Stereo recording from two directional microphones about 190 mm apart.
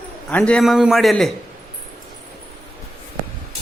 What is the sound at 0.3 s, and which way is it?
A man's voice, 5° left (ahead or behind).